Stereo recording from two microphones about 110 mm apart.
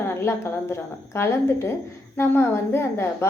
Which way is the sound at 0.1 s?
25° left (ahead or behind).